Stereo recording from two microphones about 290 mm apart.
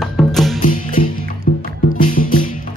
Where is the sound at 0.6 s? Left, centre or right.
Left.